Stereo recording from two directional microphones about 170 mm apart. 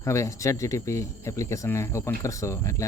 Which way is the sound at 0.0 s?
15° left (ahead or behind).